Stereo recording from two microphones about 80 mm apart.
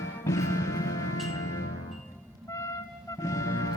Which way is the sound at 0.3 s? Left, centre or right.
Left.